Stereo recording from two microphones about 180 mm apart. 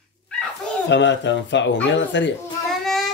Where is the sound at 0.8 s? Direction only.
80° left.